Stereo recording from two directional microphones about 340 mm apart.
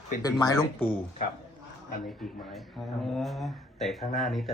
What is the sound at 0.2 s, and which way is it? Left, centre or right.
Speech, centre.